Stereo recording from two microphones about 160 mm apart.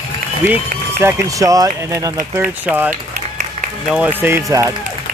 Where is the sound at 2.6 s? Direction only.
10° right (ahead or behind).